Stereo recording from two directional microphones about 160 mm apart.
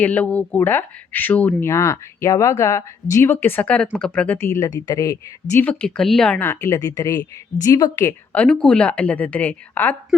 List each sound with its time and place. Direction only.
0.0 s speech: 10° left (ahead or behind)
5.5 s speech: 10° left (ahead or behind)
8.3 s speech: 5° left (ahead or behind)